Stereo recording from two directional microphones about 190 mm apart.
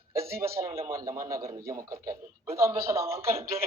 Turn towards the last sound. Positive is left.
turn(degrees=-15)  # may be behind; listen again after turning